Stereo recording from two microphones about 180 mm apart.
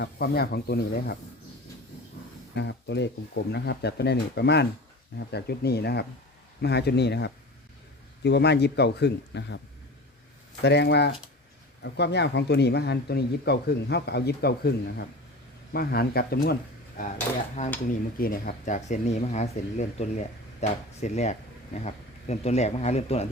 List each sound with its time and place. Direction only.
0.0 s speech: 60° left (ahead or behind)
2.6 s speech: 75° left (ahead or behind)
10.6 s speech: 70° left (ahead or behind)
17.8 s speech: 55° left (ahead or behind); by 23.3 s 35° left (ahead or behind)